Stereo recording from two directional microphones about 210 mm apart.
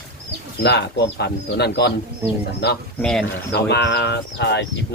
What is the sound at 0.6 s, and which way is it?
Speech, 55° left (ahead or behind).